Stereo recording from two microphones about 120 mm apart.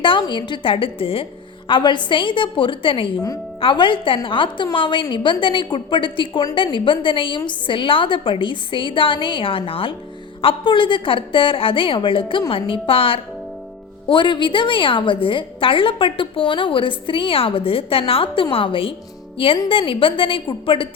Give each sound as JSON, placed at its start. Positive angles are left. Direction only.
{"t": 0.0, "sound": "a woman's voice", "side_deg": 40}